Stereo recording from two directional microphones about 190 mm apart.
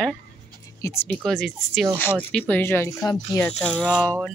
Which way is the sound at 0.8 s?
15° left (ahead or behind).